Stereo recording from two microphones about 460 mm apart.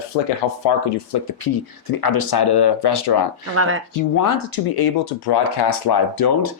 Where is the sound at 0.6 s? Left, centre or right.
Left.